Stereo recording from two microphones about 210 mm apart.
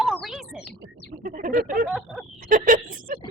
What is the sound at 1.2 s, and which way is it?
Speech, 40° right (ahead or behind).